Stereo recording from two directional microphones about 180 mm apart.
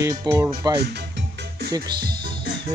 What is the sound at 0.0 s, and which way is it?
Speech, 20° right (ahead or behind).